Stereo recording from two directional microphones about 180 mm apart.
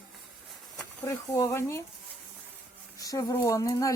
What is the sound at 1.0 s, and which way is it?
Speech, 15° left (ahead or behind).